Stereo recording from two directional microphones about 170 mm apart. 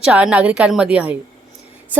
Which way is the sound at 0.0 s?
5° right (ahead or behind).